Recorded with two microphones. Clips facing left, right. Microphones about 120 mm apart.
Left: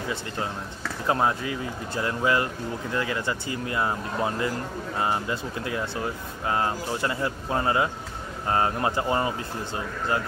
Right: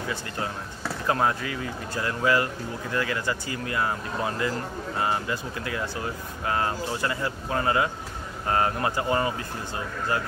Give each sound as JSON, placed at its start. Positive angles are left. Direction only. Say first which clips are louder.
{"t": 1.0, "sound": "speech", "louder": "left 1 dB", "side_deg": 20}